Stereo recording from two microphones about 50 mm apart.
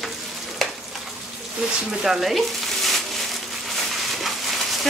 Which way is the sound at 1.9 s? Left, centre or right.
Centre.